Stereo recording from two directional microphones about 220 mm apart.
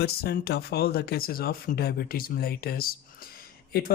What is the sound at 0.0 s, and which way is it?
Speech, 45° left (ahead or behind).